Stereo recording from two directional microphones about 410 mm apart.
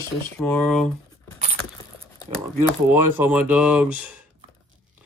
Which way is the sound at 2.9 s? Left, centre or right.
Centre.